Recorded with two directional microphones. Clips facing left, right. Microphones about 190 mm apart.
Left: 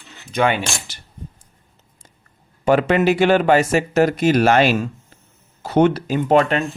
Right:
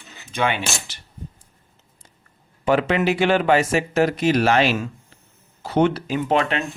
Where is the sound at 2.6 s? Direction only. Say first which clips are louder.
Left 4 dB; 45° left (ahead or behind).